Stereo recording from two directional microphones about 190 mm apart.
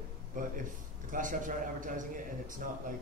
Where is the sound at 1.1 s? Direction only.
45° right (ahead or behind).